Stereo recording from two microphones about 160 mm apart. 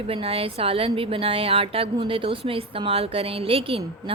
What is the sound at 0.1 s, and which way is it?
A woman's voice, 35° right (ahead or behind).